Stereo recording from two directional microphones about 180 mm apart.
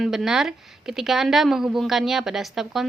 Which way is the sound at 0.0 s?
Centre (ahead or behind).